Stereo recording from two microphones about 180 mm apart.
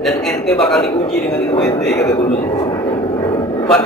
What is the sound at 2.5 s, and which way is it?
Vehicle, 25° left (ahead or behind).